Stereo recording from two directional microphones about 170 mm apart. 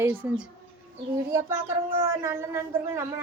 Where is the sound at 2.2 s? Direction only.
15° right (ahead or behind).